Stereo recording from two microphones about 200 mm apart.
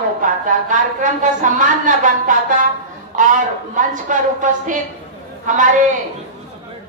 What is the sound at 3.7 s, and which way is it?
A woman's voice, 40° right (ahead or behind).